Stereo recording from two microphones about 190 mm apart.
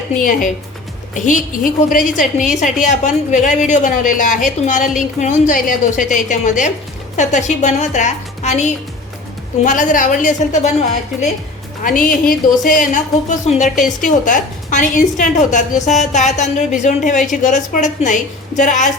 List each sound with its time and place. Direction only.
0.2 s a woman's voice: 45° left (ahead or behind)
11.8 s a woman's voice: 45° left (ahead or behind)